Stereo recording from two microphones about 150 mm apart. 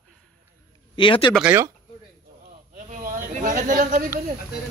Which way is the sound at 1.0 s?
35° left (ahead or behind).